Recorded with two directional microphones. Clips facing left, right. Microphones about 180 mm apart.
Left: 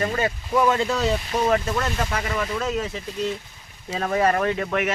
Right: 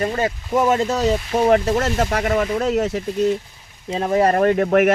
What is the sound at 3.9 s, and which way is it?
Speech, 25° right (ahead or behind).